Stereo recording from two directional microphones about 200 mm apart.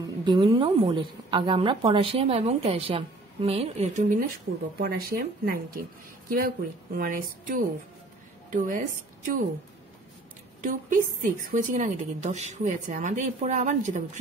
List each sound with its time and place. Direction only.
0.0 s a woman's voice: 25° right (ahead or behind); by 9.4 s 40° right (ahead or behind)
10.6 s a woman's voice: 40° right (ahead or behind)